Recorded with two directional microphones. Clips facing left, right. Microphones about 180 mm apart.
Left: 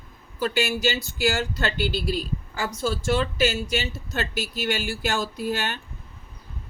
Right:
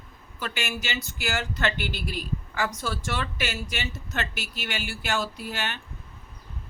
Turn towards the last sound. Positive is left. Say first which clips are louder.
# left 6 dB
turn(degrees=40)  # may be behind; listen again after turning